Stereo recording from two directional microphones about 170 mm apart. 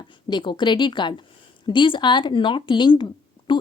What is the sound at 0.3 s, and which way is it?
Speech, 25° left (ahead or behind).